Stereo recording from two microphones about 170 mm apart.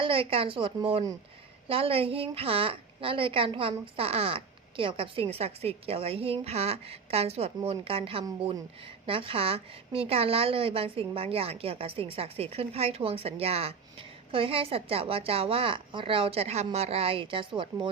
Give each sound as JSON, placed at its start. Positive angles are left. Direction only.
{"t": 0.0, "sound": "a woman's voice", "side_deg": -30}